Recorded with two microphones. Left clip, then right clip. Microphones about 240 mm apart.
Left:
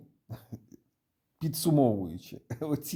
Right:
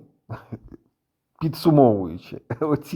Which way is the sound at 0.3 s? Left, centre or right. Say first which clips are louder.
Right 11 dB; centre.